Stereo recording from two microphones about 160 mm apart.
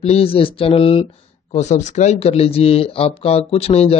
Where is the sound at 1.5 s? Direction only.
45° left (ahead or behind).